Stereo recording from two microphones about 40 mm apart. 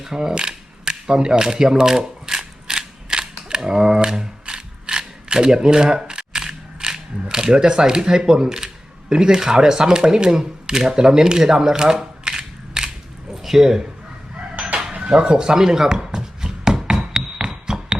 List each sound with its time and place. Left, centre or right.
0.0 s camera: centre
8.3 s speech: centre
13.3 s speech: centre
15.0 s a sound: right